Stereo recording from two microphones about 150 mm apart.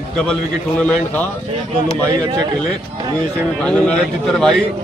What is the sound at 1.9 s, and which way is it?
Speech, 30° right (ahead or behind).